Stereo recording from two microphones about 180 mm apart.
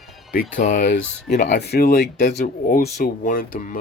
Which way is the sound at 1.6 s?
60° left (ahead or behind).